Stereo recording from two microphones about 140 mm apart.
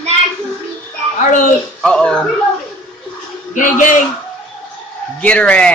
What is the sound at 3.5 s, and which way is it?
Speech, 65° left (ahead or behind).